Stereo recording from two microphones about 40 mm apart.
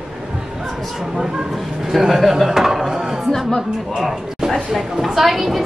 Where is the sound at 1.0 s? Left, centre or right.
Centre.